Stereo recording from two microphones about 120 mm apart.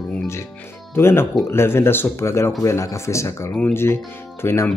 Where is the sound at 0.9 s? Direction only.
20° left (ahead or behind).